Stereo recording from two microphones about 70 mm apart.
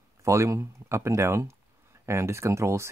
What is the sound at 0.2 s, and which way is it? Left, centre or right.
Speech, right.